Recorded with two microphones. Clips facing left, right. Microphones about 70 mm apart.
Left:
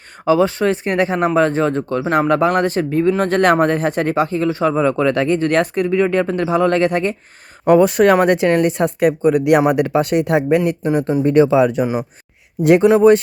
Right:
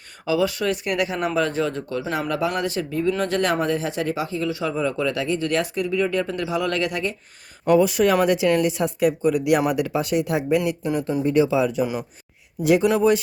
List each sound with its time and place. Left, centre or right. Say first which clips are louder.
0.3 s speech: left 7 dB; left
10.6 s speech: left 6 dB; left